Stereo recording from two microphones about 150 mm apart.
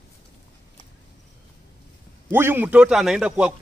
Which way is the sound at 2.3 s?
15° right (ahead or behind).